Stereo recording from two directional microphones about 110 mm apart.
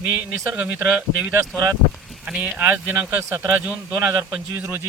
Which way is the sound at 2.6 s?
20° right (ahead or behind).